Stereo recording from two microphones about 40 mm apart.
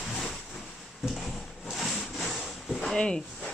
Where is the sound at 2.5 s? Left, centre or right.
Centre.